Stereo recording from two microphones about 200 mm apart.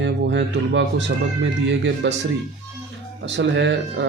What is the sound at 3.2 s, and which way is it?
Speech, 60° right (ahead or behind).